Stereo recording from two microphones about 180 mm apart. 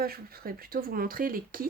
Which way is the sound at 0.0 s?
55° right (ahead or behind).